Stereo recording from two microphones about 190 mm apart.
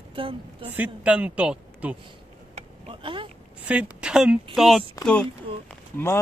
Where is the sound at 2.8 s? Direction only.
25° right (ahead or behind).